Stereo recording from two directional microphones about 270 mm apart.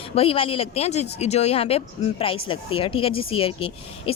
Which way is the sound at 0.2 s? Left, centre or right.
Left.